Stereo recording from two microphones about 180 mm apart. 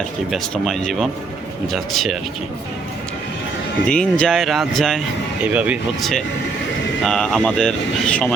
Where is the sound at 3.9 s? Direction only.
5° left (ahead or behind).